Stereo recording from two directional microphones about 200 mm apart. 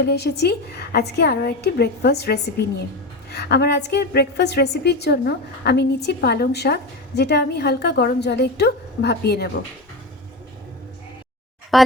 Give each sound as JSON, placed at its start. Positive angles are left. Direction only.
{"t": 0.0, "sound": "a woman's voice", "side_deg": 55}
{"t": 11.7, "sound": "speech", "side_deg": 0}